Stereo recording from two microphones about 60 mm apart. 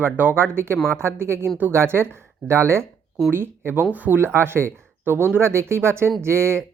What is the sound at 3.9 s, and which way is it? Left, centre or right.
Speech, right.